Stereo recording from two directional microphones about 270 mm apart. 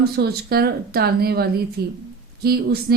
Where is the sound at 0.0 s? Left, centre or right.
Right.